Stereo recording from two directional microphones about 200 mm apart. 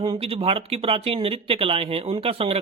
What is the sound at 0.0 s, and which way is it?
Speech, 30° right (ahead or behind).